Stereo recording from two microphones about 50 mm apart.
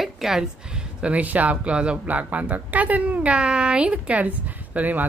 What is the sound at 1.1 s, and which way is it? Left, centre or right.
Speech, right.